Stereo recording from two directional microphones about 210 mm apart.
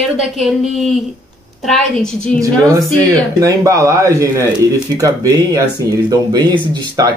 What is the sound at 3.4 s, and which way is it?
Speech, 15° right (ahead or behind).